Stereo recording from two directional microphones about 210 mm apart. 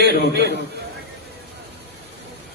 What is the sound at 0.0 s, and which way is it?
Speech, 55° right (ahead or behind).